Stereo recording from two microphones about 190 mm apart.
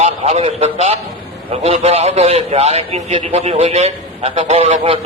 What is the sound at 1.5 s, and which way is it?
A man's voice, 35° right (ahead or behind).